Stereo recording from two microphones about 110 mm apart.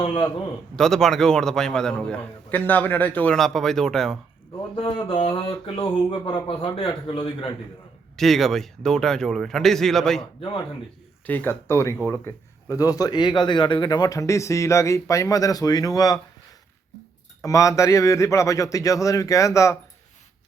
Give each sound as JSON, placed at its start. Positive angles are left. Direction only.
{"t": 0.0, "sound": "a man's voice", "side_deg": 55}
{"t": 0.8, "sound": "a man's voice", "side_deg": 5}
{"t": 3.3, "sound": "speech", "side_deg": 5}
{"t": 4.7, "sound": "speech", "side_deg": 50}
{"t": 8.1, "sound": "speech", "side_deg": 0}
{"t": 11.3, "sound": "a man's voice", "side_deg": 15}
{"t": 17.4, "sound": "a man's voice", "side_deg": 30}